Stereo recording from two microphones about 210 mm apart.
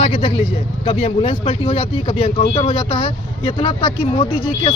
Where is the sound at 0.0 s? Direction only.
30° left (ahead or behind).